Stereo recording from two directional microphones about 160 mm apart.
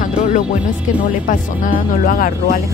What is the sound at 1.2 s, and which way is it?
Speech, 60° left (ahead or behind).